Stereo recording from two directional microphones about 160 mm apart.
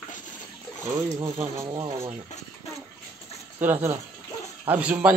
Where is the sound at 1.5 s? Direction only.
25° right (ahead or behind).